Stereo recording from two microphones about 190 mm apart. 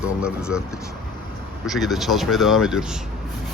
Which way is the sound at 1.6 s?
Centre (ahead or behind).